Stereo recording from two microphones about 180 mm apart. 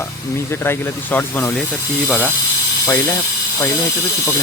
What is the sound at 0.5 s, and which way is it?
Speech, 10° left (ahead or behind).